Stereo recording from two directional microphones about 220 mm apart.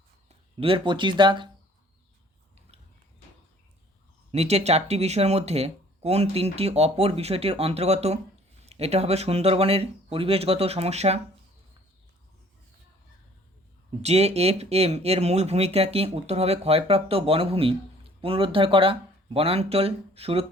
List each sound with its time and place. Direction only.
0.3 s speech: 25° right (ahead or behind)
4.3 s speech: 30° right (ahead or behind)
14.0 s speech: 30° right (ahead or behind)